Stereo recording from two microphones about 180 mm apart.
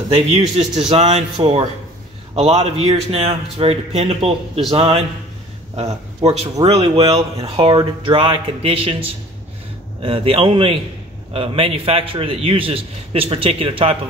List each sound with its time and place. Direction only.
0.1 s a man's voice: 35° right (ahead or behind)